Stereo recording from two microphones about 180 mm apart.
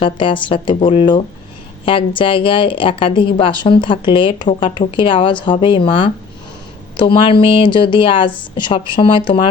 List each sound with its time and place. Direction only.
0.0 s a woman's voice: 30° left (ahead or behind)